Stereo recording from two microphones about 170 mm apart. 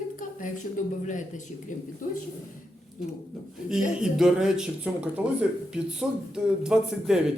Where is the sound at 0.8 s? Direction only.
50° left (ahead or behind).